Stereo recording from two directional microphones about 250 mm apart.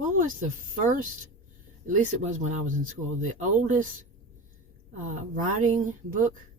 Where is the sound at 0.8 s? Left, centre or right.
Right.